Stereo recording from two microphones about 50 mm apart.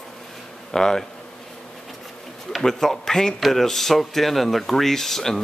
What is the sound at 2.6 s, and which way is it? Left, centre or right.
Speech, centre.